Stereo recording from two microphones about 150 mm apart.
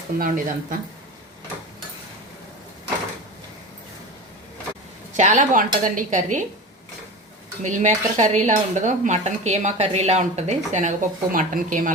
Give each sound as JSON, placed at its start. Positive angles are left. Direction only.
{"t": 0.2, "sound": "a woman's voice", "side_deg": -65}
{"t": 5.1, "sound": "a woman's voice", "side_deg": -55}
{"t": 7.6, "sound": "speech", "side_deg": -55}